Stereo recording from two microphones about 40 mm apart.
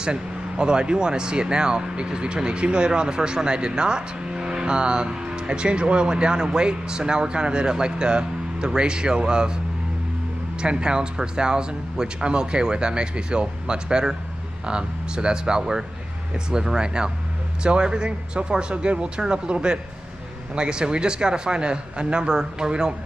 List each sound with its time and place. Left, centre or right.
0.0 s speech: right
10.6 s speech: right